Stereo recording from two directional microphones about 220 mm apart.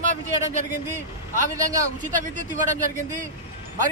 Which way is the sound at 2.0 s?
35° right (ahead or behind).